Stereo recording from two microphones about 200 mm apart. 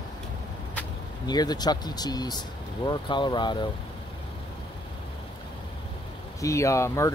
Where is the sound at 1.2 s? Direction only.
20° left (ahead or behind).